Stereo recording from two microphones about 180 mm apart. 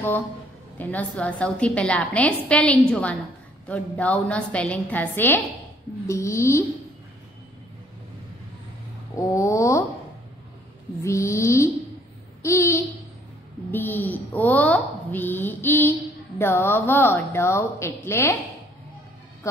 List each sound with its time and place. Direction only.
0.7 s a child's voice: 10° left (ahead or behind)
9.1 s a child's voice: 15° left (ahead or behind)
11.0 s a child's voice: 15° left (ahead or behind)
12.4 s babbling: 15° left (ahead or behind)
13.7 s a child's voice: 10° left (ahead or behind)